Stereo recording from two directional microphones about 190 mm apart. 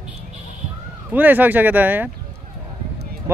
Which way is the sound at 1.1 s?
10° right (ahead or behind).